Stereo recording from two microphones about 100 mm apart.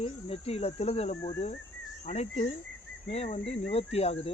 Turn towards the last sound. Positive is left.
turn(degrees=85)